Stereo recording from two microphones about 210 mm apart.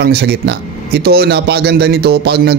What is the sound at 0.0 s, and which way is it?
Speech, 50° right (ahead or behind).